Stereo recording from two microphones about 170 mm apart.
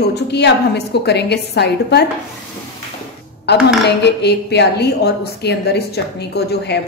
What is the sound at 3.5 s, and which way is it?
A woman's voice, 80° left.